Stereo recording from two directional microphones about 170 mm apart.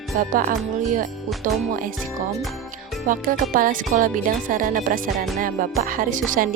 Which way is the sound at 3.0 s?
55° right (ahead or behind).